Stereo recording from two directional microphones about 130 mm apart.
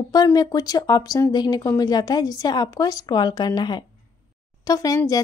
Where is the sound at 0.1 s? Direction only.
30° left (ahead or behind).